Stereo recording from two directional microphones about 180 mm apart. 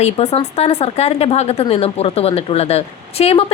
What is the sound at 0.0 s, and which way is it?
Speech, 35° left (ahead or behind).